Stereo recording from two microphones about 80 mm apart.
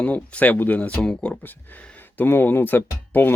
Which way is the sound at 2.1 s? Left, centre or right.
Left.